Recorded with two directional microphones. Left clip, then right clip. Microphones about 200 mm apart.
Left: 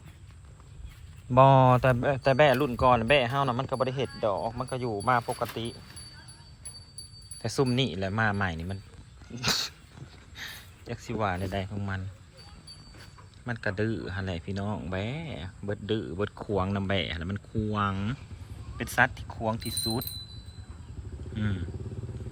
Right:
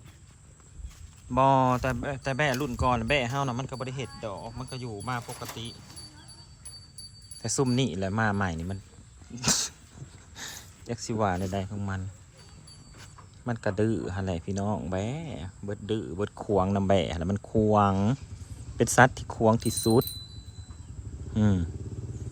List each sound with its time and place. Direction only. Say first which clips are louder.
1.3 s speech: left 3 dB; 10° right (ahead or behind)
7.4 s speech: even; 15° right (ahead or behind)
9.3 s dog: even; 15° right (ahead or behind)
10.3 s speech: even; 20° right (ahead or behind)
13.4 s speech: right 2 dB; 20° right (ahead or behind)
18.8 s speech: right 5 dB; 35° right (ahead or behind)
21.3 s speech: right 7 dB; 30° right (ahead or behind)